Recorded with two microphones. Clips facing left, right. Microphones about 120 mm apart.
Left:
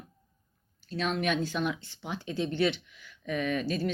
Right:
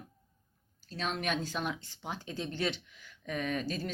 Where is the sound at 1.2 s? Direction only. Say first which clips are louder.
Left 5 dB; 40° right (ahead or behind).